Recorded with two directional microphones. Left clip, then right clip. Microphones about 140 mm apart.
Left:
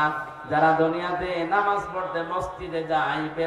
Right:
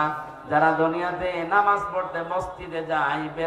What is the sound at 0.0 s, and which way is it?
Mantra, 30° right (ahead or behind).